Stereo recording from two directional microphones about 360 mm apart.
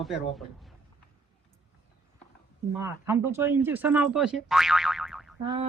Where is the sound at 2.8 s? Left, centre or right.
Centre.